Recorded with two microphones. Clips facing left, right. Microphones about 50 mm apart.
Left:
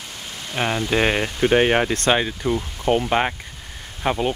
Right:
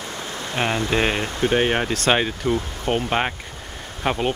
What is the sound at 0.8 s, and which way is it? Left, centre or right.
Speech, centre.